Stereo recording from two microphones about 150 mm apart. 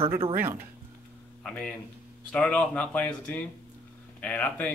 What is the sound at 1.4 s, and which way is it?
A man's voice, 10° left (ahead or behind).